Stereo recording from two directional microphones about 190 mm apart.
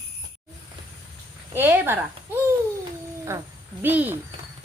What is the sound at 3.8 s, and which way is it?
Speech, 10° right (ahead or behind).